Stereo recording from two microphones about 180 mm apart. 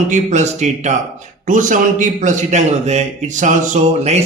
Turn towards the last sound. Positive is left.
turn(degrees=-40)  # may be behind; listen again after turning